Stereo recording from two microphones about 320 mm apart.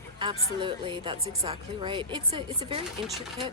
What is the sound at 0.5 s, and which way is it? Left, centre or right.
A woman's voice, centre.